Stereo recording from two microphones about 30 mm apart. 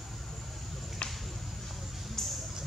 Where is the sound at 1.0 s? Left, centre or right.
Left.